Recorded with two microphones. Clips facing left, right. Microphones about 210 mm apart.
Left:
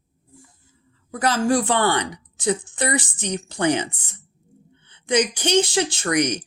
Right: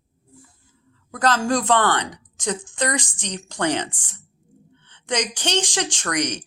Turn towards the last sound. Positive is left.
turn(degrees=10)  # may be behind; listen again after turning